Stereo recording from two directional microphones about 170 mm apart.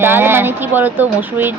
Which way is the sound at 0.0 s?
15° right (ahead or behind).